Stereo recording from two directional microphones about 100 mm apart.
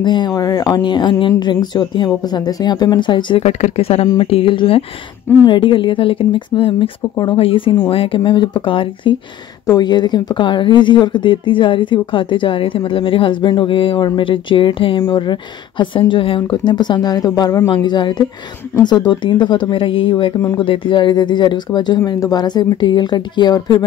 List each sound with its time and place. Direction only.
0.0 s speech: 50° left (ahead or behind)
0.3 s speech: 35° left (ahead or behind); by 3.4 s 55° left (ahead or behind)
3.4 s speech: 90° left
4.2 s a woman's voice: 75° left (ahead or behind); by 9.1 s 55° left (ahead or behind)
9.7 s speech: 45° left (ahead or behind)
17.8 s speech: 50° left (ahead or behind)